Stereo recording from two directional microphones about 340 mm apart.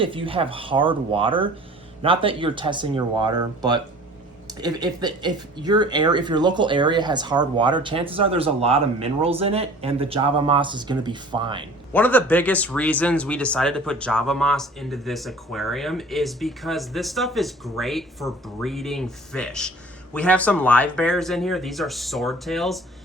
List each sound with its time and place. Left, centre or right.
0.0 s speech: centre
11.9 s speech: centre